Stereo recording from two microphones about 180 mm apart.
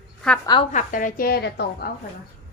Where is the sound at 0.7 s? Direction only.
50° left (ahead or behind).